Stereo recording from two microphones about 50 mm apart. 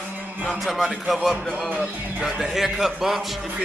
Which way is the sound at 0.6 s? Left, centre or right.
Centre.